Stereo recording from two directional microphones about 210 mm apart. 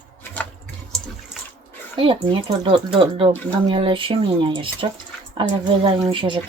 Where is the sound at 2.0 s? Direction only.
25° right (ahead or behind).